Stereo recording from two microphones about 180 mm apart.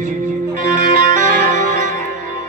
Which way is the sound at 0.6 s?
45° right (ahead or behind).